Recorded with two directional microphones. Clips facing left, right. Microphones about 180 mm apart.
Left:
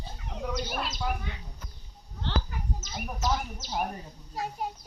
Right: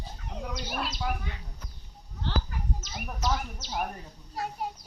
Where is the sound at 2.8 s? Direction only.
5° left (ahead or behind).